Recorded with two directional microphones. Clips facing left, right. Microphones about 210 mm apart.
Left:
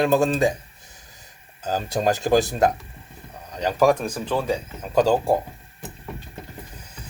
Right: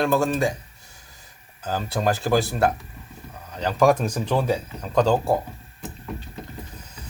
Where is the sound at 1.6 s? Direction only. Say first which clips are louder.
Left 2 dB; 15° left (ahead or behind).